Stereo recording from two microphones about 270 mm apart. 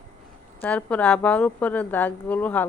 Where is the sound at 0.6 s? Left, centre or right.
Centre.